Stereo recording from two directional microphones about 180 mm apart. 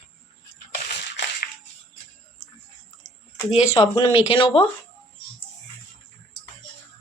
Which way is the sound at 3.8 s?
30° left (ahead or behind).